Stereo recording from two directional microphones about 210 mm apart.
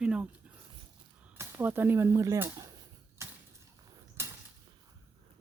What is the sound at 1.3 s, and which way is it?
Speech, 10° right (ahead or behind).